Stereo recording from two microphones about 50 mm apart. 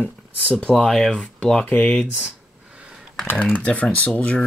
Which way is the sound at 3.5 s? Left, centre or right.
Left.